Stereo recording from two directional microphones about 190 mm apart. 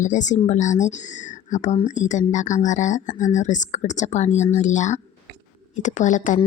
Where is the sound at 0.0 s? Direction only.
40° left (ahead or behind).